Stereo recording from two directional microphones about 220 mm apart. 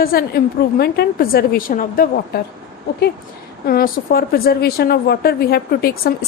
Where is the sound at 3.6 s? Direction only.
45° left (ahead or behind).